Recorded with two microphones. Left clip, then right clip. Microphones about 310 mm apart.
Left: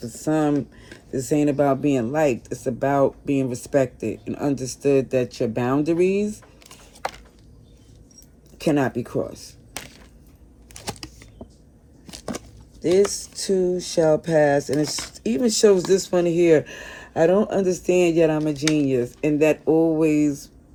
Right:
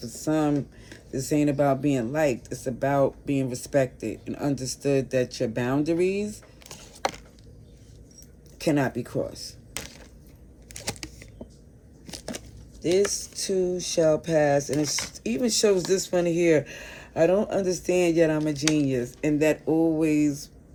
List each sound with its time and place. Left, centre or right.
0.0 s speech: centre
8.5 s speech: centre
10.8 s a sound: centre
12.8 s speech: centre